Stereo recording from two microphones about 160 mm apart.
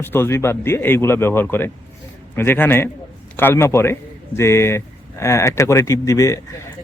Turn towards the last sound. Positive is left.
turn(degrees=20)  # may be behind; listen again after turning